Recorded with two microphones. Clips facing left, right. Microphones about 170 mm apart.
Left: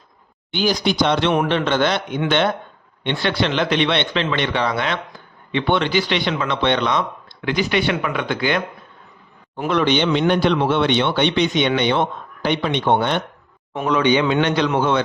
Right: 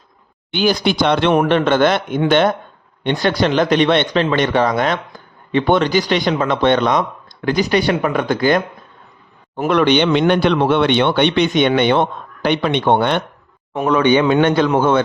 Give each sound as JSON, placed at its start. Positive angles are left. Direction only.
{"t": 0.5, "sound": "speech", "side_deg": -60}
{"t": 9.6, "sound": "speech", "side_deg": -55}
{"t": 13.7, "sound": "speech", "side_deg": -50}